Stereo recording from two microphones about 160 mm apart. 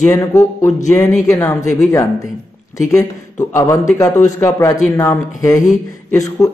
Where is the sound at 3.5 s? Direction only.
20° left (ahead or behind).